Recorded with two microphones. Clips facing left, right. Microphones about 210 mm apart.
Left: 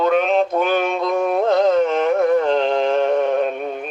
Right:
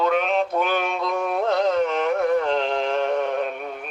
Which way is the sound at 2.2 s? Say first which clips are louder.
Left 4 dB; 45° left (ahead or behind).